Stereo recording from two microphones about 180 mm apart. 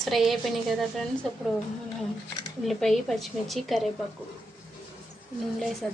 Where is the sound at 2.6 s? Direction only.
Centre (ahead or behind).